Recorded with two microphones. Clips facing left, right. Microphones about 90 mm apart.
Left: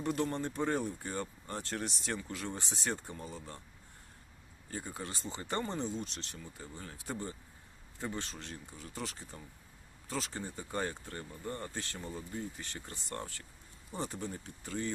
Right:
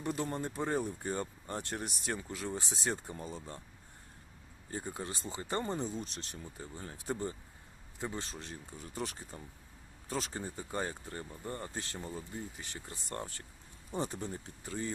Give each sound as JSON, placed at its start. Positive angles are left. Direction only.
{"t": 0.0, "sound": "speech", "side_deg": -15}
{"t": 4.9, "sound": "speech", "side_deg": -20}